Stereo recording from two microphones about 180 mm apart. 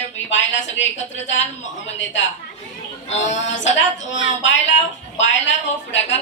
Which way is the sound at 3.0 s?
40° left (ahead or behind).